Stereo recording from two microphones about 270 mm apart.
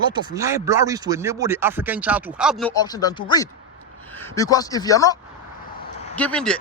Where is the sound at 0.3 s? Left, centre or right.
Centre.